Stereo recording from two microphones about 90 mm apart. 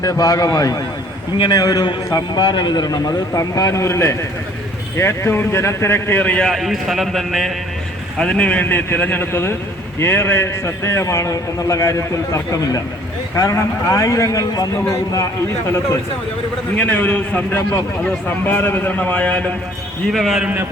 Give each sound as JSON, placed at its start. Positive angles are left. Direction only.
{"t": 0.0, "sound": "a man's voice", "side_deg": 40}
{"t": 6.4, "sound": "speech", "side_deg": 0}
{"t": 8.2, "sound": "a man's voice", "side_deg": 10}
{"t": 9.3, "sound": "a man's voice", "side_deg": 30}
{"t": 16.7, "sound": "a man's voice", "side_deg": 20}
{"t": 20.1, "sound": "speech", "side_deg": -5}